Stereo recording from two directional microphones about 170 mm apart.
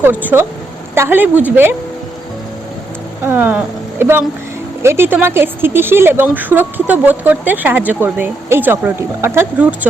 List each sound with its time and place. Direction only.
0.0 s speech: 10° right (ahead or behind)
3.2 s speech: 10° right (ahead or behind)